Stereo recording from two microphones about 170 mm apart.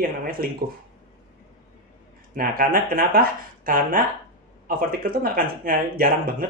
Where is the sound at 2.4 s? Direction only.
60° right (ahead or behind).